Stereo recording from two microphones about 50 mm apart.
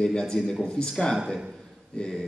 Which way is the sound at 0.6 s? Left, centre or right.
Centre.